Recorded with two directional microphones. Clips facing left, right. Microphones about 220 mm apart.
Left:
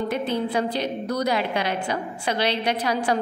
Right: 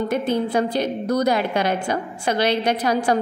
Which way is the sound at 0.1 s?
45° right (ahead or behind).